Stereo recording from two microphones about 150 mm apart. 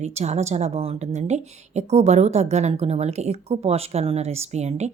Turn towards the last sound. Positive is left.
turn(degrees=-50)  # may be behind; listen again after turning